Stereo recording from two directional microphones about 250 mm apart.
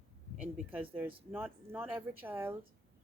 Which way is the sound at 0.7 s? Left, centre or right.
Centre.